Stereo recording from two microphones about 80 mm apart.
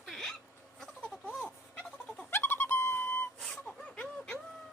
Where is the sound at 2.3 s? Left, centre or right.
Left.